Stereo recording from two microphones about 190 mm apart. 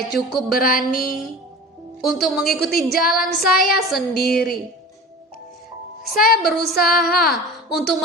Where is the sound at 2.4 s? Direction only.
55° left (ahead or behind).